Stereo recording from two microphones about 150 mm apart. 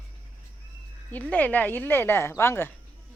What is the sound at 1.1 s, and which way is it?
Speech, 10° left (ahead or behind).